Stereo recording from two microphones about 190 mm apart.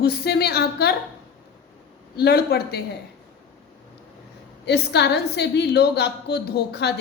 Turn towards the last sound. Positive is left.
turn(degrees=60)  # may be behind; listen again after turning